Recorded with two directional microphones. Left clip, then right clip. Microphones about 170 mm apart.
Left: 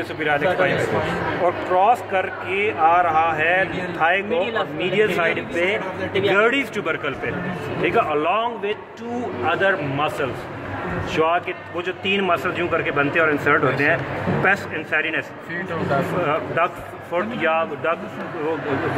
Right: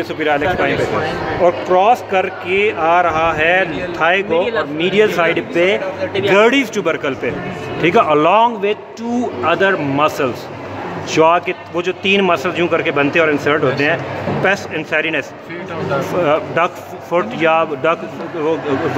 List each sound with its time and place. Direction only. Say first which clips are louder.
0.2 s a man's voice: right 3 dB; 60° right (ahead or behind)
16.3 s a man's voice: right 6 dB; 50° right (ahead or behind)